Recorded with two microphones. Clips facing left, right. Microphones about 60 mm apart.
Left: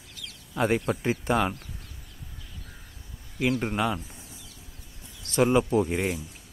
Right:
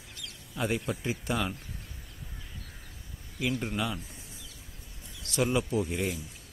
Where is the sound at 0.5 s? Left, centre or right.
Left.